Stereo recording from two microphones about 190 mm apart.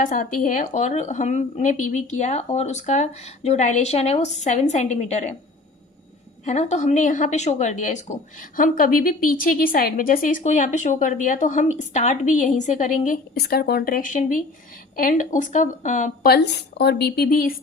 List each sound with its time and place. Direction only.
0.0 s speech: 45° left (ahead or behind)
6.4 s a woman's voice: 35° left (ahead or behind)